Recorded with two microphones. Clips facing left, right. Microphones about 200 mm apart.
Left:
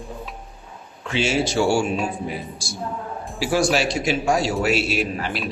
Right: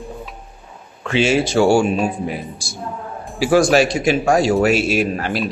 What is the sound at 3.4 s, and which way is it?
A man's voice, 50° right (ahead or behind).